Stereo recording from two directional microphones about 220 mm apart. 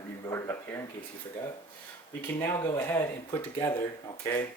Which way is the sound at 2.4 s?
15° left (ahead or behind).